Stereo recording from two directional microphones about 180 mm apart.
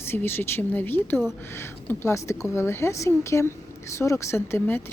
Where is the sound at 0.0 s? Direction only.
10° left (ahead or behind).